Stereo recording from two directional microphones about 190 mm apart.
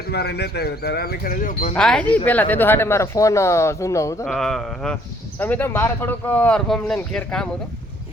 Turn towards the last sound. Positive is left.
turn(degrees=5)  # may be behind; listen again after turning